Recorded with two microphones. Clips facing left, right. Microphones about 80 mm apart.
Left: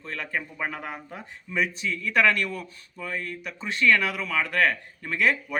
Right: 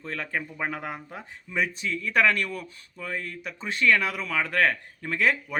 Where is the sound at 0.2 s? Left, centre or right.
Right.